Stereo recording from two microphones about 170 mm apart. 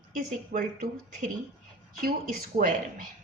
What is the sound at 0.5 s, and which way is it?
Speech, 50° right (ahead or behind).